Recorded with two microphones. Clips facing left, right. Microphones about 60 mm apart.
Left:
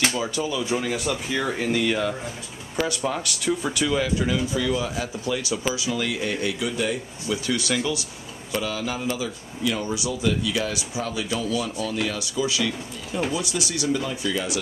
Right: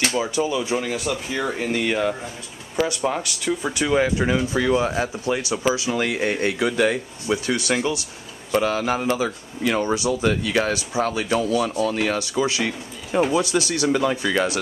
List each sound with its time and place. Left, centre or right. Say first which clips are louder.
0.1 s speech: right 4 dB; right
0.7 s speech: right 1 dB; centre
1.7 s speech: right 2 dB; centre; by 7.0 s right
7.2 s speech: right 3 dB; right
8.5 s speech: right 7 dB; right
13.3 s speech: right 6 dB; right